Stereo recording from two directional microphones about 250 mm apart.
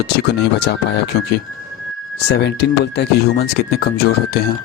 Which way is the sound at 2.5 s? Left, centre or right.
Left.